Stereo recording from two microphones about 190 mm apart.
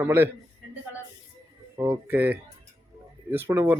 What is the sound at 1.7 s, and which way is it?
A man's voice, 10° right (ahead or behind).